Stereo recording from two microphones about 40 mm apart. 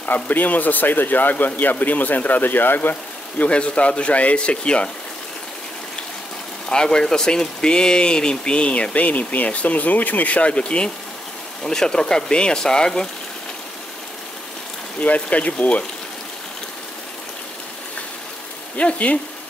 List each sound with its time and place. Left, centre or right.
0.0 s speech: left
3.4 s speech: left
6.7 s speech: centre
8.9 s speech: left; by 13.1 s centre
15.0 s speech: left
18.8 s speech: left